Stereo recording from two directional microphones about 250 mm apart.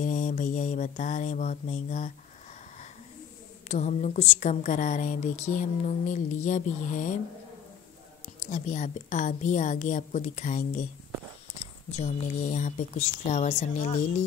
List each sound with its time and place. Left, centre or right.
0.0 s a woman's voice: left
3.6 s a woman's voice: left
8.5 s a woman's voice: left